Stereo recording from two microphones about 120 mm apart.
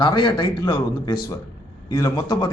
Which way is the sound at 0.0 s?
40° left (ahead or behind).